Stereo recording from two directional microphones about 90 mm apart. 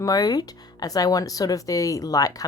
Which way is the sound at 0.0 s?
45° left (ahead or behind).